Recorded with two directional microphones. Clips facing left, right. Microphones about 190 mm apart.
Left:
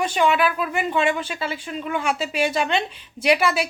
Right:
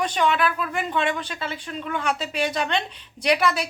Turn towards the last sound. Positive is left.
turn(degrees=5)  # may be behind; listen again after turning